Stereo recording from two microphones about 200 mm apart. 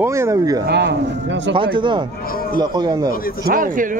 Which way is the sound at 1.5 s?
25° right (ahead or behind).